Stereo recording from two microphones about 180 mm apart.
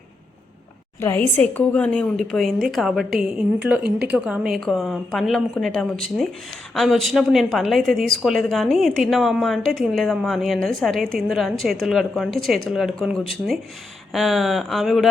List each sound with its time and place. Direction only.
1.0 s a woman's voice: 10° left (ahead or behind)